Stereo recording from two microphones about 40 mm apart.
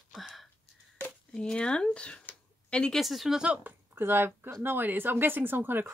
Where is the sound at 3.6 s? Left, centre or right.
Right.